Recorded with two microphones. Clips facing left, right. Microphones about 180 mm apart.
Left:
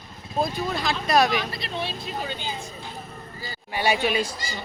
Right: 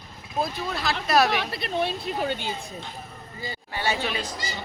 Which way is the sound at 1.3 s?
65° right (ahead or behind).